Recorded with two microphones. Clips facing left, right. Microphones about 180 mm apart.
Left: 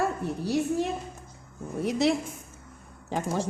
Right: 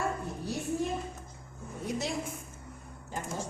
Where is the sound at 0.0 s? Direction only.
80° left.